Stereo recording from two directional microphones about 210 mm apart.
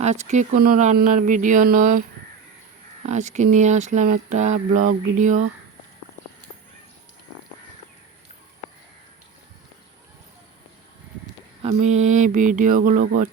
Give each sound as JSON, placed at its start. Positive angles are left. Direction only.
{"t": 0.0, "sound": "speech", "side_deg": -35}
{"t": 3.1, "sound": "speech", "side_deg": -35}
{"t": 11.6, "sound": "speech", "side_deg": -35}